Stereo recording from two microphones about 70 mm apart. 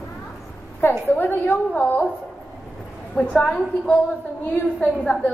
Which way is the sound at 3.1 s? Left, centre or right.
Centre.